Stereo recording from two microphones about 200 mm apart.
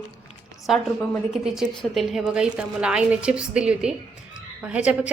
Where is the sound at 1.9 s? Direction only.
Centre (ahead or behind).